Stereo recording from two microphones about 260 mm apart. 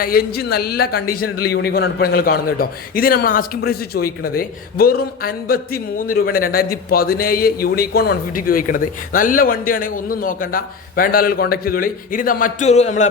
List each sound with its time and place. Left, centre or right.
0.0 s a man's voice: left